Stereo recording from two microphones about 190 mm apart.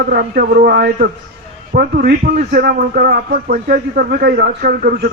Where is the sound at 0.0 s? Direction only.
50° right (ahead or behind).